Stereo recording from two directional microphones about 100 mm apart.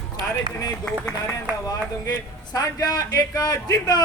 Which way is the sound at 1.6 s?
40° left (ahead or behind).